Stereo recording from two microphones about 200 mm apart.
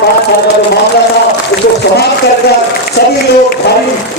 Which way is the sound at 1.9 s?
55° left (ahead or behind).